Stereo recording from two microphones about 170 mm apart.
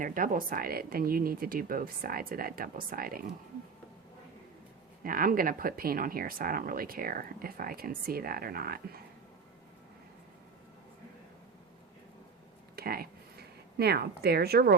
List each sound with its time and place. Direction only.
0.0 s speech: 55° right (ahead or behind)
5.0 s speech: 55° right (ahead or behind)
12.7 s speech: 60° right (ahead or behind)